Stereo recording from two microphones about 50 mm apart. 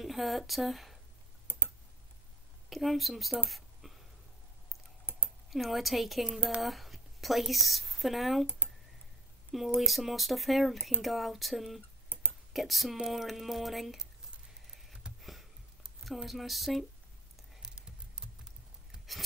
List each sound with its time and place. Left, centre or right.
0.0 s speech: centre
2.7 s speech: centre
3.4 s a sound: centre
5.5 s a woman's voice: centre
9.8 s speech: centre
12.1 s a sound: left
12.5 s speech: centre
14.7 s a sound: centre
16.0 s speech: centre
17.6 s typing: centre